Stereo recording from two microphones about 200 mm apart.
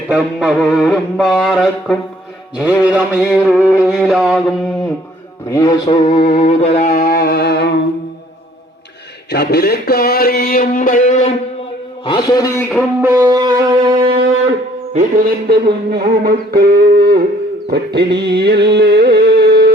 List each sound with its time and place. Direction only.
0.1 s music: 5° right (ahead or behind)
2.6 s mantra: 5° right (ahead or behind)
3.4 s music: 5° right (ahead or behind)
5.5 s mantra: 20° left (ahead or behind); by 7.8 s 55° left (ahead or behind)
9.3 s a sound: 55° left (ahead or behind); by 11.3 s 35° left (ahead or behind)
12.0 s a man's voice: 20° left (ahead or behind)
12.7 s mantra: 10° right (ahead or behind)
13.3 s music: 20° right (ahead or behind)
14.9 s music: 40° right (ahead or behind)